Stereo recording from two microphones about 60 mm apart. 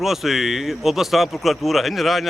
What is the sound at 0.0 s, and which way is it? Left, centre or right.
Speech, centre.